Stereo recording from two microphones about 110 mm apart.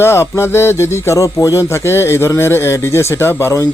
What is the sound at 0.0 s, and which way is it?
Speech, 20° left (ahead or behind).